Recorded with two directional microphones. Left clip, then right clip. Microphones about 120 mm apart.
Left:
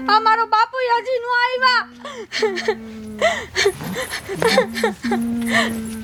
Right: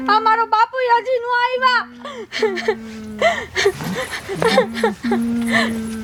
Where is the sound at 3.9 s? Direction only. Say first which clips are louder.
Right 1 dB; 5° left (ahead or behind).